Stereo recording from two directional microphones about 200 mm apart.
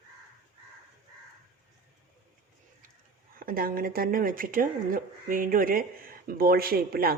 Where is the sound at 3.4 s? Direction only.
45° right (ahead or behind).